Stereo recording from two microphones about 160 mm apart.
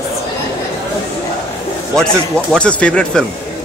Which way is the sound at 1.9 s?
5° left (ahead or behind).